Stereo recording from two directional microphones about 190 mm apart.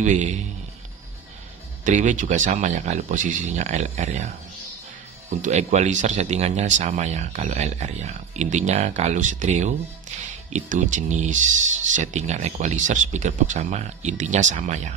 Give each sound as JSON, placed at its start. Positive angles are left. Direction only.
{"t": 0.0, "sound": "speech", "side_deg": -40}
{"t": 1.9, "sound": "speech", "side_deg": -40}
{"t": 5.4, "sound": "speech", "side_deg": -40}